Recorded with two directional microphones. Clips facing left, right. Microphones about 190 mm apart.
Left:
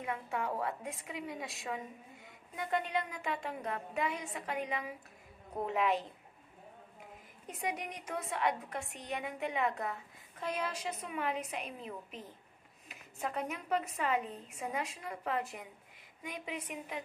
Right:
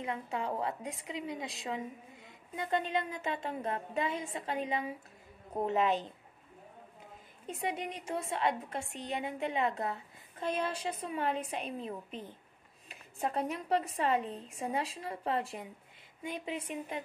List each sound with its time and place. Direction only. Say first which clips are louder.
0.0 s a woman's voice: right 1 dB; 20° right (ahead or behind)
7.4 s a woman's voice: right 3 dB; 25° right (ahead or behind)